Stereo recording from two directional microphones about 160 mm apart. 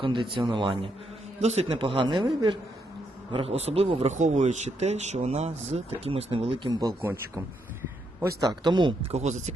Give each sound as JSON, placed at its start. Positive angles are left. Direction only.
{"t": 0.0, "sound": "speech", "side_deg": -30}
{"t": 1.4, "sound": "speech", "side_deg": -45}
{"t": 7.0, "sound": "speech", "side_deg": -15}
{"t": 9.1, "sound": "speech", "side_deg": -45}